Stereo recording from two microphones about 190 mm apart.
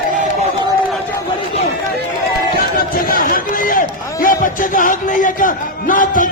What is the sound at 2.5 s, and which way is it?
Run, 50° left (ahead or behind).